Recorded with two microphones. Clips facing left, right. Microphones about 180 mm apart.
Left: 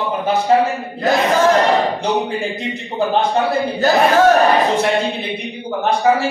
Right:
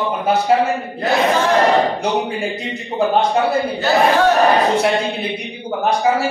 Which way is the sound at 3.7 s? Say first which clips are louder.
Left 3 dB; 40° left (ahead or behind).